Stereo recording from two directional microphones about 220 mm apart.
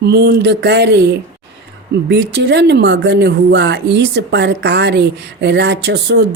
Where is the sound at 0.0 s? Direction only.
45° right (ahead or behind).